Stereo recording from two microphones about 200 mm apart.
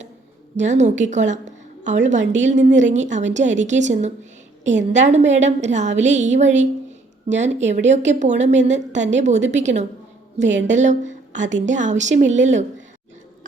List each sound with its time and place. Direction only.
0.5 s a woman's voice: 35° right (ahead or behind)